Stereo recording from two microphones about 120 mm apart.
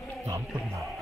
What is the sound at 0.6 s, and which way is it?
Music, centre (ahead or behind).